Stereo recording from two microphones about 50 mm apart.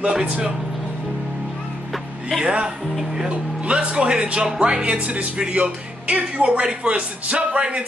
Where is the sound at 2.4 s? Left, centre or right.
Right.